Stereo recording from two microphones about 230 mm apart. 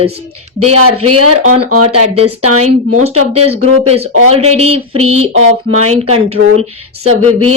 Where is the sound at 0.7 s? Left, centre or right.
Right.